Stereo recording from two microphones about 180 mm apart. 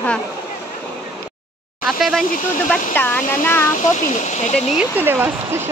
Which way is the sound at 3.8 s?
40° left (ahead or behind).